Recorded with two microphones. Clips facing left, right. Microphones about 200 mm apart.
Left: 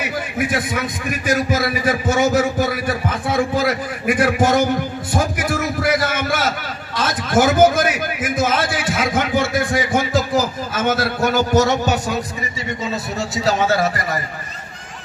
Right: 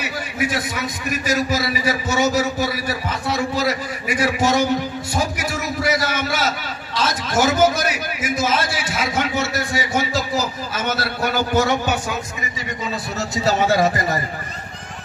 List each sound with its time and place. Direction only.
0.0 s a man's voice: 50° left (ahead or behind)
13.7 s a man's voice: 15° right (ahead or behind)